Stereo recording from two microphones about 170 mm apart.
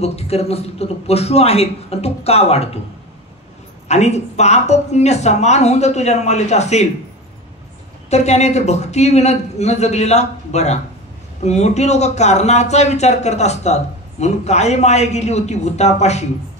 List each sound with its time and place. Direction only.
0.0 s a woman's voice: 35° left (ahead or behind)
3.8 s a woman's voice: 40° left (ahead or behind)
8.1 s a woman's voice: 40° left (ahead or behind)